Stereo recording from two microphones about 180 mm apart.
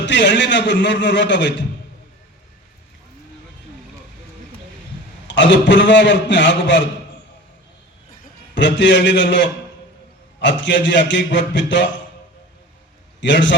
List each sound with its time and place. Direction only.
0.0 s a man's voice: 90° left
5.3 s a man's voice: 85° left
8.5 s a man's voice: 85° left
13.2 s a man's voice: 90° left